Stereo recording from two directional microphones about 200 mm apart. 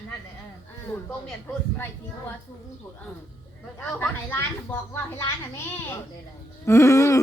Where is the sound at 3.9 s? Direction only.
10° left (ahead or behind).